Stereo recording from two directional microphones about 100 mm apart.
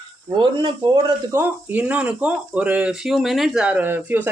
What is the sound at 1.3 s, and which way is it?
Speech, 20° right (ahead or behind).